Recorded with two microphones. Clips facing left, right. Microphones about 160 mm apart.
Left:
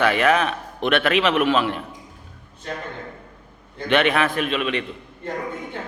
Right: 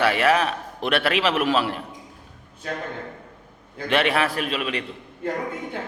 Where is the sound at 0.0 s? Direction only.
35° right (ahead or behind).